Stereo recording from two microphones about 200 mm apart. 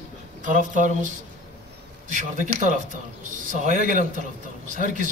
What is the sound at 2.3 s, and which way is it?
Speech, 40° right (ahead or behind).